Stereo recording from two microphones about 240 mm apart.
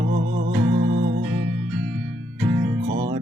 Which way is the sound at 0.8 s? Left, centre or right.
Right.